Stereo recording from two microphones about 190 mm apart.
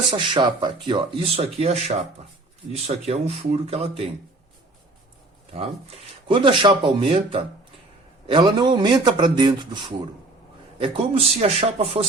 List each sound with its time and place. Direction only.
0.1 s speech: 25° right (ahead or behind)
6.2 s speech: 25° right (ahead or behind)